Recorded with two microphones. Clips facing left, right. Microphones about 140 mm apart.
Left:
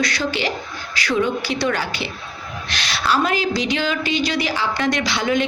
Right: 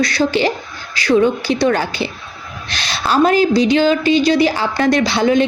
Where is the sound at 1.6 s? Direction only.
45° right (ahead or behind).